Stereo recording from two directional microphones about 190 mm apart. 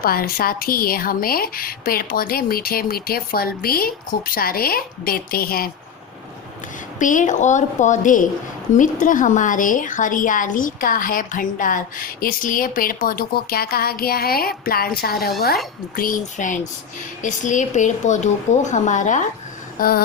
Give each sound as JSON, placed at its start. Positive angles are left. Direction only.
{"t": 0.0, "sound": "a woman's voice", "side_deg": 50}
{"t": 7.0, "sound": "a woman's voice", "side_deg": 40}
{"t": 19.8, "sound": "a woman's voice", "side_deg": 50}